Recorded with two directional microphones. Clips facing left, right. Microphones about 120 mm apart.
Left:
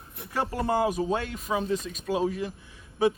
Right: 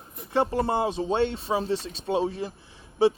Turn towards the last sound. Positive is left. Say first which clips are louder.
# right 3 dB
turn(degrees=-30)  # may be behind; listen again after turning